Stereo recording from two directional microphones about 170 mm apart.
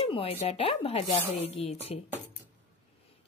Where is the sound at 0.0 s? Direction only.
35° left (ahead or behind).